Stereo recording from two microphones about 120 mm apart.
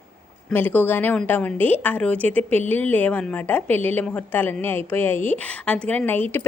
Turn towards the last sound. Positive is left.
turn(degrees=15)  # may be behind; listen again after turning